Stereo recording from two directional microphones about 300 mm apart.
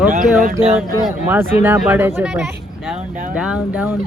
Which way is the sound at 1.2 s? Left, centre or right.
Centre.